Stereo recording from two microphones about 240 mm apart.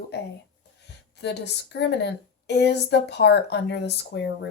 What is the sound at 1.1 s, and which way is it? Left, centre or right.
A woman's voice, left.